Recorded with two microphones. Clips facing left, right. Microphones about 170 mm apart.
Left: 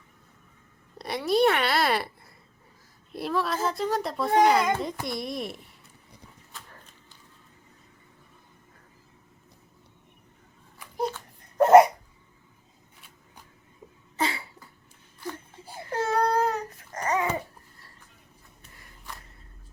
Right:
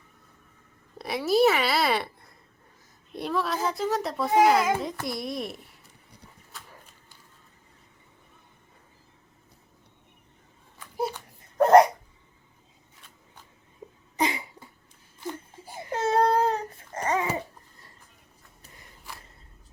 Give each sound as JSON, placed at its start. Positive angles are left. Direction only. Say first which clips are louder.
{"t": 0.9, "sound": "a woman's voice", "louder": "right 1 dB", "side_deg": 0}
{"t": 6.5, "sound": "horse", "louder": "even", "side_deg": -10}
{"t": 10.9, "sound": "a sound", "louder": "even", "side_deg": -5}
{"t": 14.2, "sound": "cough", "louder": "right 2 dB", "side_deg": -15}
{"t": 15.2, "sound": "baby cry", "louder": "right 1 dB", "side_deg": -20}